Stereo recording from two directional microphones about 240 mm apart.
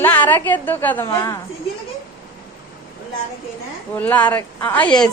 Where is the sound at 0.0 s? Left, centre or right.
Centre.